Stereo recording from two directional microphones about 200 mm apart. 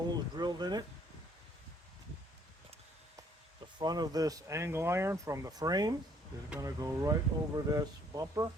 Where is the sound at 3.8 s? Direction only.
20° right (ahead or behind).